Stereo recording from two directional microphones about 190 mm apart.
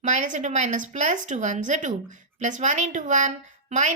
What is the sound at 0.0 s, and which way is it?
A woman's voice, 40° right (ahead or behind).